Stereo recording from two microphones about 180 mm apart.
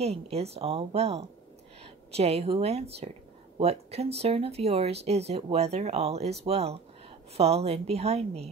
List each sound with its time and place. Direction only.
0.0 s speech: 35° right (ahead or behind)